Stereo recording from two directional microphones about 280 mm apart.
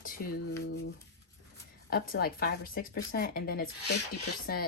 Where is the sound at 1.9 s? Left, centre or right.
Left.